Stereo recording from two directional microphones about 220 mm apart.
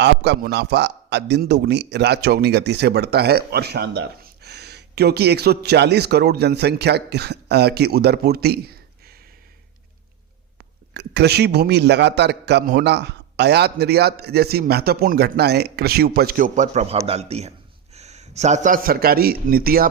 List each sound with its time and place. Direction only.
0.0 s a man's voice: 50° right (ahead or behind)
10.6 s a man's voice: 50° right (ahead or behind)